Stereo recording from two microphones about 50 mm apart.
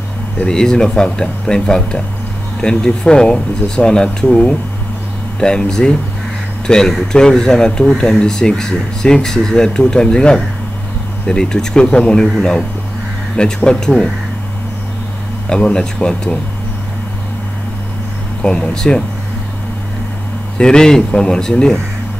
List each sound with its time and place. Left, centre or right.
0.5 s speech: centre
13.7 s speech: centre
15.5 s speech: centre
18.4 s speech: centre
20.5 s speech: centre